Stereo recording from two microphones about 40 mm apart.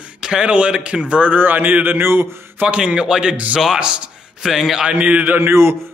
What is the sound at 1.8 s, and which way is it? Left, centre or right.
Speech, right.